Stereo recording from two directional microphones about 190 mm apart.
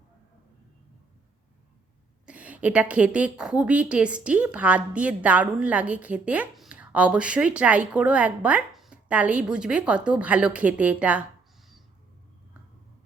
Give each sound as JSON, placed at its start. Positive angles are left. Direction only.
{"t": 2.2, "sound": "a woman's voice", "side_deg": -5}